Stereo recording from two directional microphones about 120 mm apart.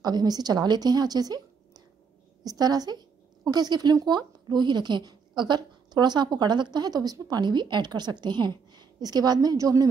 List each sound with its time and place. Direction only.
0.0 s a woman's voice: 35° right (ahead or behind)